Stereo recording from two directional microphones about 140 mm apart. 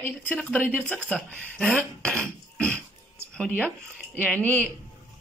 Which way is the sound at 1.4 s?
5° left (ahead or behind).